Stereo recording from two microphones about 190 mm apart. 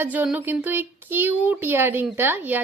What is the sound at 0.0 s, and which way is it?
Speech, 10° right (ahead or behind).